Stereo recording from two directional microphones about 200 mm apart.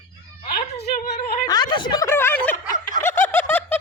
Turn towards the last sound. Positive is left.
turn(degrees=10)  # may be behind; listen again after turning